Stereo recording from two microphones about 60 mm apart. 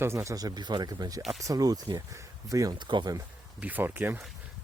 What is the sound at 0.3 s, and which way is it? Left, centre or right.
Speech, right.